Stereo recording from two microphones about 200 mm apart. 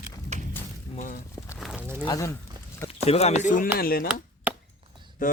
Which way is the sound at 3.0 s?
30° left (ahead or behind).